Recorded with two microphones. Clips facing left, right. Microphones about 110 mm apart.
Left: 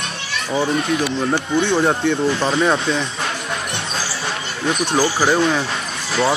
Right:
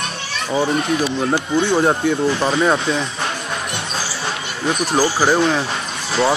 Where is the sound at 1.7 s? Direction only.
10° right (ahead or behind).